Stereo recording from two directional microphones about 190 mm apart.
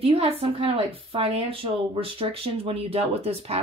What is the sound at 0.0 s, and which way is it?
A woman's voice, 30° right (ahead or behind).